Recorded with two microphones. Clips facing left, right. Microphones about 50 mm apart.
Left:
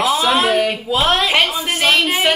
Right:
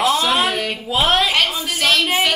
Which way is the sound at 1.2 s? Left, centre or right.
Centre.